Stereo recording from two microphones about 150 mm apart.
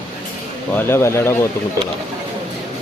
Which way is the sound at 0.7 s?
15° left (ahead or behind).